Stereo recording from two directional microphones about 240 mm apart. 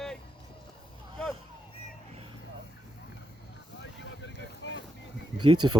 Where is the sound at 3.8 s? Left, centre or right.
Left.